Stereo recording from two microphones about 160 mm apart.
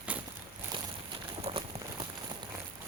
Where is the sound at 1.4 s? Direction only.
40° right (ahead or behind).